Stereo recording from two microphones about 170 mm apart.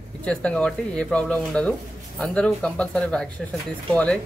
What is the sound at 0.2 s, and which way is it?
Speech, 5° left (ahead or behind).